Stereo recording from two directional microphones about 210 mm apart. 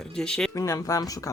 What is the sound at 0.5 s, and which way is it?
Speech, 15° left (ahead or behind).